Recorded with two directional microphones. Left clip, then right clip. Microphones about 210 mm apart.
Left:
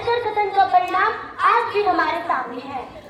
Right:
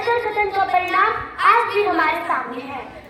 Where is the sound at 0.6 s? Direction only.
45° right (ahead or behind).